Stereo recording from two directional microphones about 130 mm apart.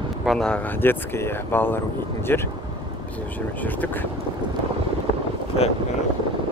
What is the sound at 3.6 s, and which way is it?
Speech, 15° left (ahead or behind).